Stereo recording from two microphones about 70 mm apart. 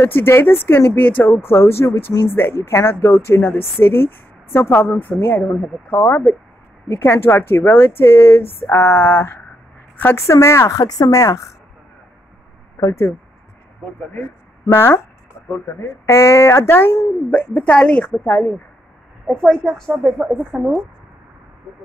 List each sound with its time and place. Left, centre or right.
0.0 s a woman's voice: left
10.2 s a woman's voice: left
12.8 s a woman's voice: left
14.7 s speech: left; by 18.1 s centre
18.2 s speech: left
19.5 s a woman's voice: centre